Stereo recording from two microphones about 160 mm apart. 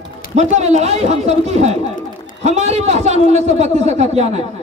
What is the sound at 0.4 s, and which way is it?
A man's voice, 45° right (ahead or behind).